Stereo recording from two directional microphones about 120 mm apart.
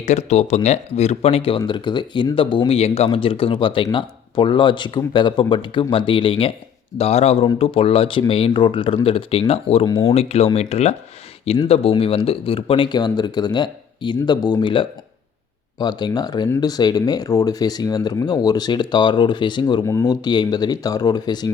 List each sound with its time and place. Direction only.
0.0 s speech: 70° left (ahead or behind); by 6.5 s 50° left (ahead or behind)
7.0 s speech: 60° left (ahead or behind); by 19.8 s 40° left (ahead or behind)
19.8 s speech: 25° left (ahead or behind)